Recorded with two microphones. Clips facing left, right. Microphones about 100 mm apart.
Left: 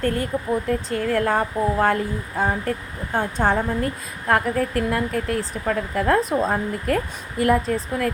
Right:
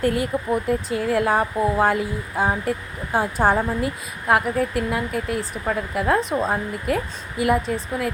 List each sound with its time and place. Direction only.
0.0 s speech: 10° right (ahead or behind)